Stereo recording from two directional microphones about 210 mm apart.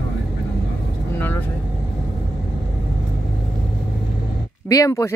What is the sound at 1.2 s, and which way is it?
Vehicle, 10° left (ahead or behind).